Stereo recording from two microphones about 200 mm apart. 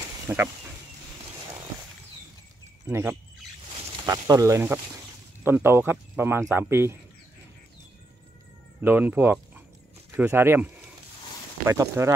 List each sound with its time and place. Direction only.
0.3 s speech: 15° right (ahead or behind)
2.8 s speech: 10° right (ahead or behind)
8.8 s speech: 10° right (ahead or behind)